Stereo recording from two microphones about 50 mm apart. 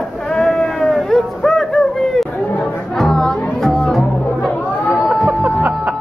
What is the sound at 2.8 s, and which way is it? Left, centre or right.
Music, centre.